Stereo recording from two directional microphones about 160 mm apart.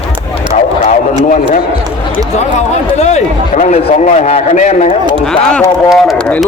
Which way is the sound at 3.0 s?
45° left (ahead or behind).